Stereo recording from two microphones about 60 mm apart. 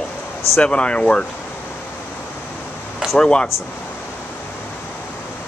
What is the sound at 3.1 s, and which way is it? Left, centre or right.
Speech, centre.